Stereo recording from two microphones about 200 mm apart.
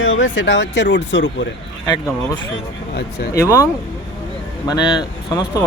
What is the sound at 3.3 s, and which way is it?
Speech, 15° left (ahead or behind).